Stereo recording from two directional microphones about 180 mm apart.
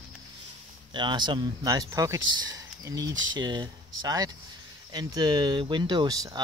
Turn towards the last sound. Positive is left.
turn(degrees=-20)  # may be behind; listen again after turning